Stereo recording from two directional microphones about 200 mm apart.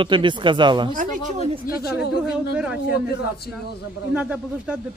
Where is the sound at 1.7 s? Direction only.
45° left (ahead or behind).